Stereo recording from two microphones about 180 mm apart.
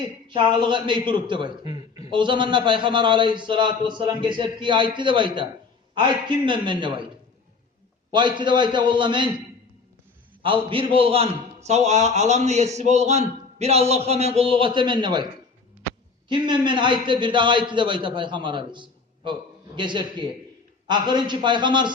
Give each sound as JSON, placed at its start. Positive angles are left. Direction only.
{"t": 0.3, "sound": "a man's voice", "side_deg": -25}
{"t": 8.1, "sound": "a man's voice", "side_deg": -25}
{"t": 10.4, "sound": "a man's voice", "side_deg": -30}
{"t": 16.3, "sound": "a man's voice", "side_deg": -25}